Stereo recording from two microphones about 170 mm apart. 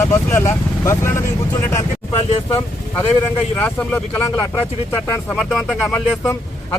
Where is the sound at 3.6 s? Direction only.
10° left (ahead or behind).